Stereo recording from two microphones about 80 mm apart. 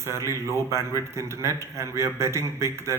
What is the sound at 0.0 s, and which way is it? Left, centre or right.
A man's voice, right.